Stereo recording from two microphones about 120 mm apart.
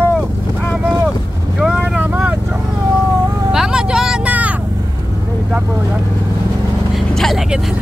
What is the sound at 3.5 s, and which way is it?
Vehicle, 5° right (ahead or behind).